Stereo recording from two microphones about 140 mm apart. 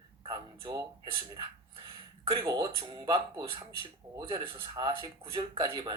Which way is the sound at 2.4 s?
30° right (ahead or behind).